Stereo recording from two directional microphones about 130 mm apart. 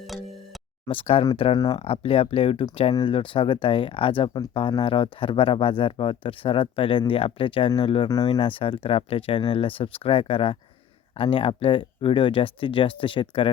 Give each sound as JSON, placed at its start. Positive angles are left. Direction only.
{"t": 0.9, "sound": "speech", "side_deg": 45}
{"t": 1.8, "sound": "speech", "side_deg": 45}